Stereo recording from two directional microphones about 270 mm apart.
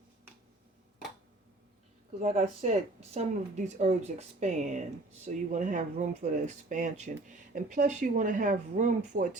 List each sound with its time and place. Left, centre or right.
2.2 s speech: right